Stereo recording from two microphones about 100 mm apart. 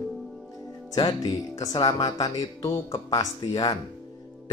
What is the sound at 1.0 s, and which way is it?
Speech, 35° left (ahead or behind).